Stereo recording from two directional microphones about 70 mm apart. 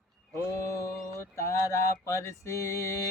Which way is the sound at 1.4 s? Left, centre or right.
Left.